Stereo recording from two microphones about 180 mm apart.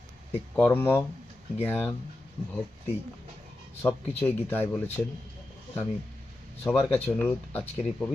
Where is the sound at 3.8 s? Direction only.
10° left (ahead or behind).